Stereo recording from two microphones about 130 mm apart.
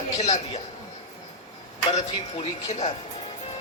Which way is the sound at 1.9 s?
60° left (ahead or behind).